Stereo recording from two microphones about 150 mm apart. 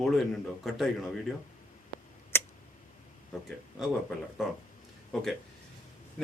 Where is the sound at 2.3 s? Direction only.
15° left (ahead or behind).